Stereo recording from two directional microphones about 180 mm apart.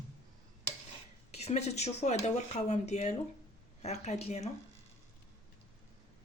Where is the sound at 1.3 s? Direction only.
35° left (ahead or behind).